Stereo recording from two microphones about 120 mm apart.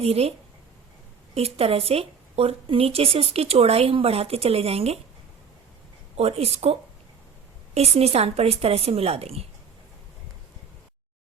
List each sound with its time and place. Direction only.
0.0 s speech: 55° right (ahead or behind)
6.1 s speech: 60° right (ahead or behind)